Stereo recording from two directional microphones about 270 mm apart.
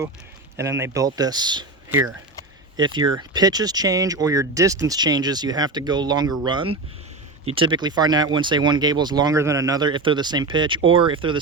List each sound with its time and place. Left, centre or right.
0.5 s speech: centre